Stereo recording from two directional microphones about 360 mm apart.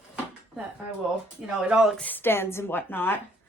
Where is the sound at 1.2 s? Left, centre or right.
Centre.